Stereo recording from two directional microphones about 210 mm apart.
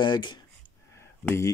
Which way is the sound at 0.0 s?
20° left (ahead or behind).